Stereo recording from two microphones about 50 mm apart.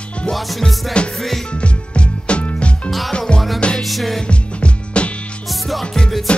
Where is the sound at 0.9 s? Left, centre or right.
Left.